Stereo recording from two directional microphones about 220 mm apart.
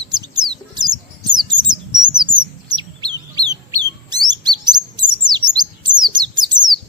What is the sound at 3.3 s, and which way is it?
Bird, 20° right (ahead or behind).